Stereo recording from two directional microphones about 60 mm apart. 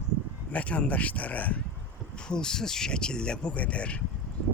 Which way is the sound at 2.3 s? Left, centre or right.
Centre.